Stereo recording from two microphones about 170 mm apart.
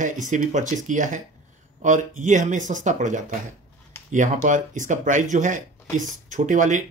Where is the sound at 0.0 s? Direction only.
45° right (ahead or behind).